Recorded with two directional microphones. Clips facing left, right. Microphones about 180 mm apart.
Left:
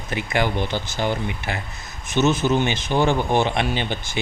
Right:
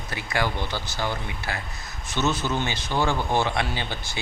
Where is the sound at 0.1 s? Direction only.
20° left (ahead or behind).